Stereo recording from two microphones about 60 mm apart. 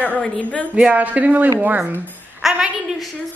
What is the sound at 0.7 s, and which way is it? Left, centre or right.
Speech, right.